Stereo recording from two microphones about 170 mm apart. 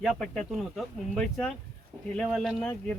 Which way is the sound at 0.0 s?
Centre (ahead or behind).